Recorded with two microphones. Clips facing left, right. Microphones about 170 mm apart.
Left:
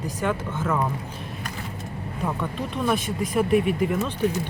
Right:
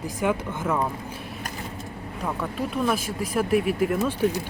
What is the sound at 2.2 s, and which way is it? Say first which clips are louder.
Speech: even; 5° right (ahead or behind).